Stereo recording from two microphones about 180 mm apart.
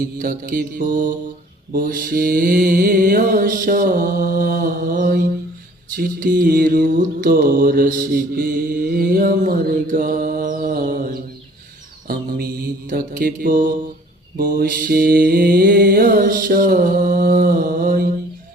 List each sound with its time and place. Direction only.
0.2 s mantra: 50° right (ahead or behind)